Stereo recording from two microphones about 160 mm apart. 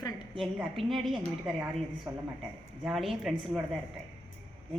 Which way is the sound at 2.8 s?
Centre (ahead or behind).